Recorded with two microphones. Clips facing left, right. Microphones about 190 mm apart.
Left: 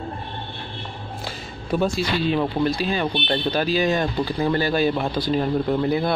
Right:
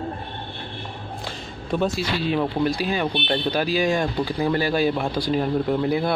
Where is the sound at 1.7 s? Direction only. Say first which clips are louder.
Left 1 dB; centre (ahead or behind).